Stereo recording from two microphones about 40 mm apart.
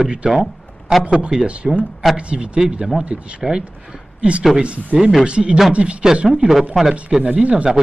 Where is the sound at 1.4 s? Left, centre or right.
Right.